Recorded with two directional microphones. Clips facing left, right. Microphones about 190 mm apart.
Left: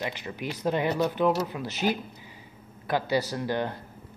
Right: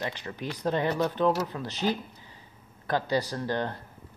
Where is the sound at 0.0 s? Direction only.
15° left (ahead or behind).